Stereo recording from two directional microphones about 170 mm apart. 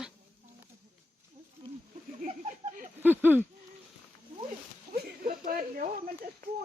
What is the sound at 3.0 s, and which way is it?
Speech, 10° right (ahead or behind).